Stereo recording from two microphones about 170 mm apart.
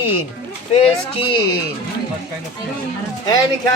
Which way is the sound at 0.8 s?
35° left (ahead or behind).